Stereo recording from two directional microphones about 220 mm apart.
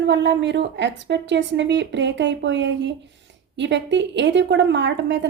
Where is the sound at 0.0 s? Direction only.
55° right (ahead or behind).